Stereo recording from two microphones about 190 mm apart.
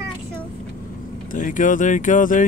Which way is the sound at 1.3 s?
45° left (ahead or behind).